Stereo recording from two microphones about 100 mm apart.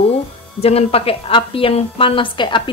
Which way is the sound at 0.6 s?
90° left.